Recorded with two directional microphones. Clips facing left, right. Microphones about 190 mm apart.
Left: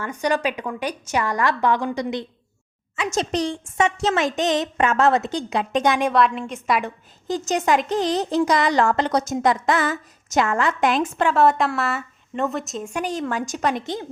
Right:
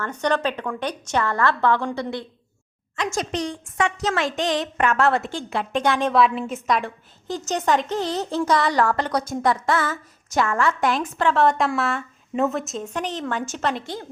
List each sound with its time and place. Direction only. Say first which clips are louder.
0.0 s a woman's voice: even; 10° left (ahead or behind)
3.3 s a woman's voice: left 3 dB; 30° left (ahead or behind)
6.1 s a woman's voice: right 1 dB; 5° right (ahead or behind)
6.7 s a woman's voice: left 1 dB; 15° left (ahead or behind)
11.3 s a woman's voice: left 2 dB; 5° left (ahead or behind)
12.8 s a woman's voice: left 2 dB; 10° left (ahead or behind)